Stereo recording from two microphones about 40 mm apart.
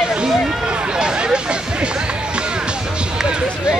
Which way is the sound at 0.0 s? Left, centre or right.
Right.